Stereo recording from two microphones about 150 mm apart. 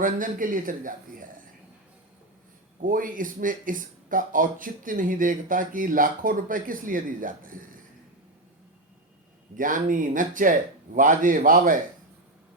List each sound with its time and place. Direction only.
0.0 s speech: 65° right (ahead or behind)
2.8 s speech: 65° right (ahead or behind)
9.6 s speech: 60° right (ahead or behind)